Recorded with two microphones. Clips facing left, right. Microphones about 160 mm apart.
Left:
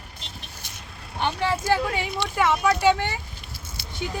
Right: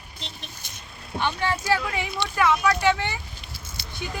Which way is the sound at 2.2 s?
5° left (ahead or behind).